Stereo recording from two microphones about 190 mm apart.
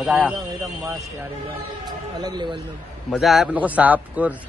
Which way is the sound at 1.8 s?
20° right (ahead or behind).